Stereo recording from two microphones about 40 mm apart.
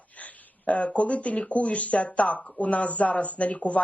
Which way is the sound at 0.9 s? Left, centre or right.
Left.